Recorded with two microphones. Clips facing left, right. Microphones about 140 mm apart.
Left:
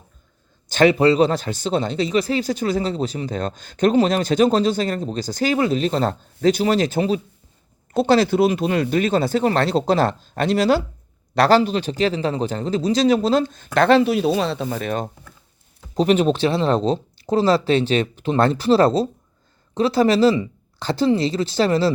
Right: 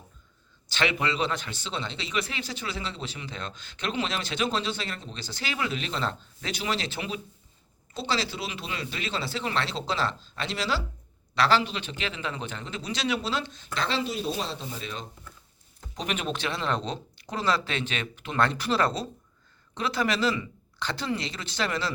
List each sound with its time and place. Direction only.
0.7 s speech: 40° left (ahead or behind)
7.9 s speech: 55° left (ahead or behind)
16.0 s speech: 35° left (ahead or behind)